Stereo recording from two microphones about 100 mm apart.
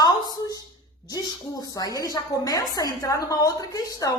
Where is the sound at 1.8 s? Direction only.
40° left (ahead or behind).